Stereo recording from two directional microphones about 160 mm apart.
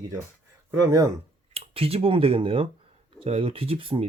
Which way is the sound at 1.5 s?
35° right (ahead or behind).